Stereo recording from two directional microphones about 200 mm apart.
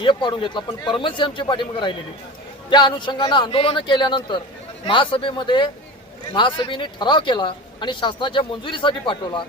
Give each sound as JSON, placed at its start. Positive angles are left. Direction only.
{"t": 0.0, "sound": "speech", "side_deg": 25}